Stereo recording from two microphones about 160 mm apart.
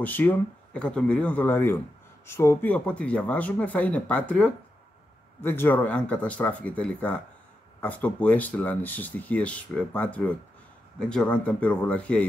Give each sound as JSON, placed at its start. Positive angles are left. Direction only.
{"t": 0.0, "sound": "speech", "side_deg": 10}